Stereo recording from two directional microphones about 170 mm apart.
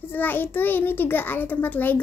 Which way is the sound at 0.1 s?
10° left (ahead or behind).